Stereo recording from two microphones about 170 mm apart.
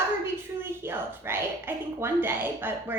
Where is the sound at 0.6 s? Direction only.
15° right (ahead or behind).